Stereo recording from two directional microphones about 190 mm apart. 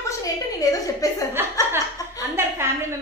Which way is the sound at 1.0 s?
20° left (ahead or behind).